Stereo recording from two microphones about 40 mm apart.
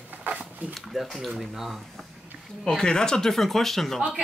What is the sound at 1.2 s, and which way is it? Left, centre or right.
Speech, centre.